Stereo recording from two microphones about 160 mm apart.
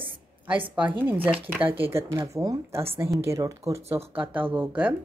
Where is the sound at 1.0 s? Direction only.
10° right (ahead or behind).